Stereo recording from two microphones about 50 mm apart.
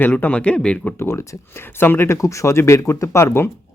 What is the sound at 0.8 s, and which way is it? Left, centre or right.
Speech, left.